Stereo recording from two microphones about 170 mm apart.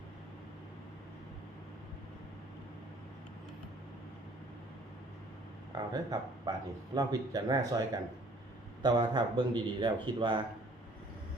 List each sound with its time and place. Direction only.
5.7 s speech: 20° right (ahead or behind)